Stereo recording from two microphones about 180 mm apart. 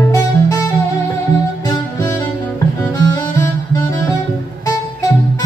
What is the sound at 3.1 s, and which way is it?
Music, 20° left (ahead or behind).